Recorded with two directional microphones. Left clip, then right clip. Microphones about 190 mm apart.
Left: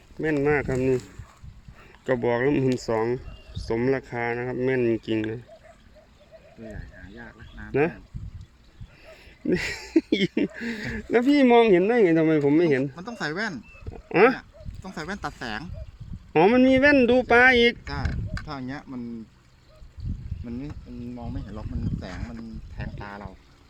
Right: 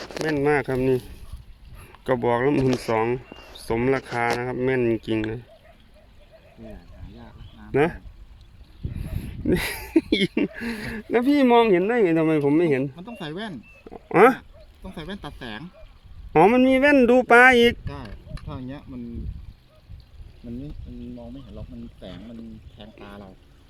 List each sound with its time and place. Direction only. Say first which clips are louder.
0.3 s speech: right 1 dB; 10° right (ahead or behind)
7.7 s speech: right 2 dB; 10° right (ahead or behind)
9.1 s speech: right 2 dB; 10° right (ahead or behind)
13.9 s speech: right 3 dB; 5° right (ahead or behind)
16.3 s speech: right 2 dB; 5° right (ahead or behind)
17.1 s speech: right 3 dB; 15° right (ahead or behind)
23.0 s speech: left 3 dB; 20° right (ahead or behind)